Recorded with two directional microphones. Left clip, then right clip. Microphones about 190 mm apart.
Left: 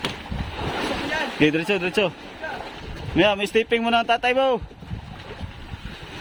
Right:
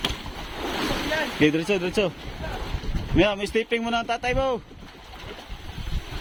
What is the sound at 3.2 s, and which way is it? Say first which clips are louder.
Speech: left 3 dB; 20° left (ahead or behind).